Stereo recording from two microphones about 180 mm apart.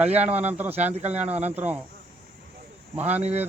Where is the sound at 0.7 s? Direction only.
35° right (ahead or behind).